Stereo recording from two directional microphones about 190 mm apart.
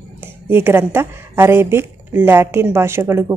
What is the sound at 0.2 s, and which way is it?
A woman's voice, 10° right (ahead or behind).